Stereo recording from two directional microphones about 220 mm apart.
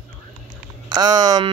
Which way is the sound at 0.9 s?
15° right (ahead or behind).